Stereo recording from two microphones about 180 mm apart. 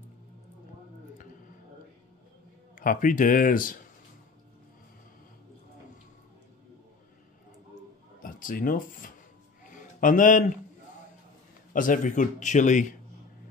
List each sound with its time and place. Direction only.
2.7 s a man's voice: 50° left (ahead or behind)
8.2 s speech: 50° left (ahead or behind)
9.7 s a sound: 45° left (ahead or behind)
11.7 s a man's voice: 50° left (ahead or behind)